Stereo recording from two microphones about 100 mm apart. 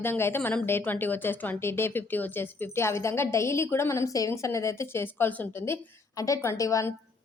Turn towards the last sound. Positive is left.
turn(degrees=30)  # may be behind; listen again after turning